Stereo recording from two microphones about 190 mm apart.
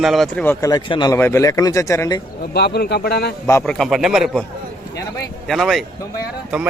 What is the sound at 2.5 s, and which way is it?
Speech, 60° left (ahead or behind).